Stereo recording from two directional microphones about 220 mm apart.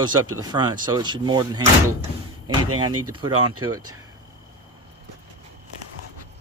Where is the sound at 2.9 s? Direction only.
90° right.